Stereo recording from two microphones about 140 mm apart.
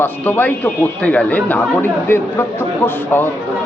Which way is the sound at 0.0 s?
15° left (ahead or behind).